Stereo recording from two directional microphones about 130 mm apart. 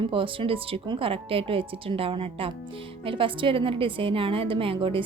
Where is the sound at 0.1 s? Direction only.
45° right (ahead or behind).